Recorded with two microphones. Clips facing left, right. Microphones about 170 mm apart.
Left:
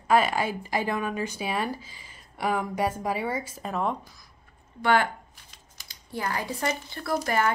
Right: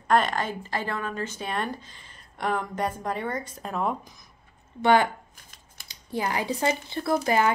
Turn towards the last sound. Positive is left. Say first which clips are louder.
# right 4 dB
turn(degrees=-25)  # may be behind; listen again after turning